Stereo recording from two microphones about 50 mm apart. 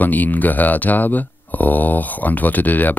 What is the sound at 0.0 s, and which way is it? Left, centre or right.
Speech, left.